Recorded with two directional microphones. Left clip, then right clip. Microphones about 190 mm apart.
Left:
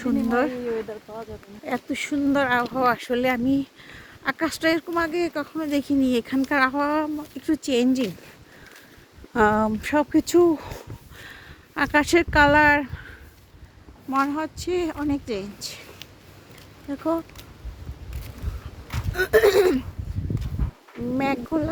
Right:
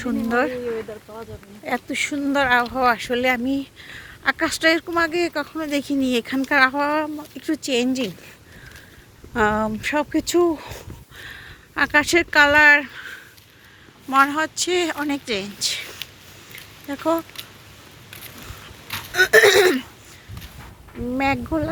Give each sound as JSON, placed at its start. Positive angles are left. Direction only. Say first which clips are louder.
{"t": 0.3, "sound": "speech", "louder": "right 3 dB", "side_deg": 15}
{"t": 0.6, "sound": "speech", "louder": "right 1 dB", "side_deg": 30}
{"t": 1.6, "sound": "speech", "louder": "right 4 dB", "side_deg": 5}
{"t": 9.3, "sound": "speech", "louder": "even", "side_deg": 25}
{"t": 11.2, "sound": "speech", "louder": "right 6 dB", "side_deg": 15}
{"t": 14.1, "sound": "speech", "louder": "right 6 dB", "side_deg": -5}
{"t": 18.9, "sound": "speech", "louder": "right 6 dB", "side_deg": 0}
{"t": 21.2, "sound": "speech", "louder": "right 3 dB", "side_deg": 0}